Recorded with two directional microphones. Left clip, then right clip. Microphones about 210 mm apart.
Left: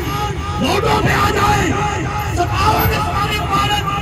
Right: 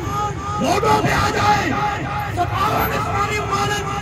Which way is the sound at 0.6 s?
55° right (ahead or behind).